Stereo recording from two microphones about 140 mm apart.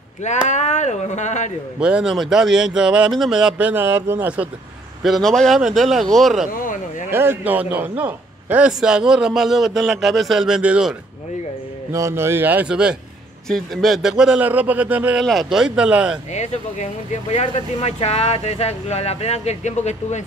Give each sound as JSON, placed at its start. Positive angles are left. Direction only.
{"t": 0.5, "sound": "speech", "side_deg": 55}
{"t": 1.8, "sound": "speech", "side_deg": -5}
{"t": 5.0, "sound": "a man's voice", "side_deg": 0}
{"t": 6.5, "sound": "speech", "side_deg": 75}
{"t": 7.1, "sound": "a man's voice", "side_deg": -15}
{"t": 11.9, "sound": "a man's voice", "side_deg": -20}
{"t": 16.3, "sound": "speech", "side_deg": 55}